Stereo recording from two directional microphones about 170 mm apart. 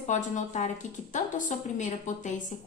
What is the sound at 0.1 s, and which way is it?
A woman's voice, 45° left (ahead or behind).